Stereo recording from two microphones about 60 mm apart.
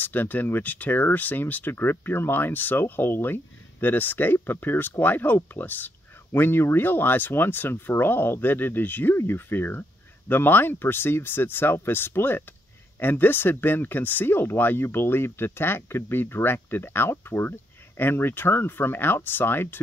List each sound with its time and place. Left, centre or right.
0.0 s speech: left